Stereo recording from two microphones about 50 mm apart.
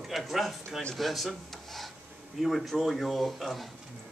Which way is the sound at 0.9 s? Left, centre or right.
Centre.